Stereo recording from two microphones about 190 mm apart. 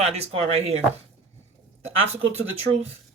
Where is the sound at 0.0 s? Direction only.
35° right (ahead or behind).